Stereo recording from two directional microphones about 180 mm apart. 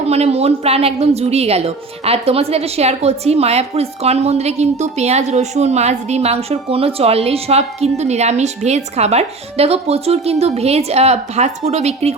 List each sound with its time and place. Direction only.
0.1 s a woman's voice: 35° right (ahead or behind)